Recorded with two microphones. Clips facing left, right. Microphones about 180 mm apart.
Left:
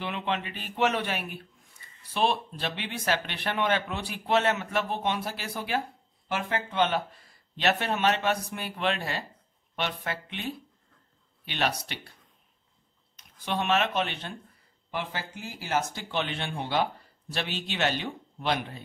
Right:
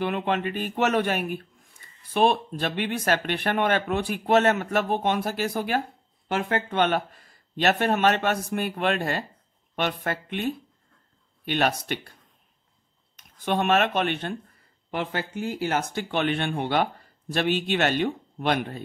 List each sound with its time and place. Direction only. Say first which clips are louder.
0.0 s speech: right 6 dB; 50° right (ahead or behind)
6.2 s speech: right 5 dB; 60° right (ahead or behind)
13.1 s speech: right 6 dB; 50° right (ahead or behind)